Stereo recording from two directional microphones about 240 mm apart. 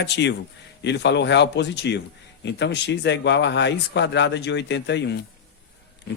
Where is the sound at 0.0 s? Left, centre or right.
Left.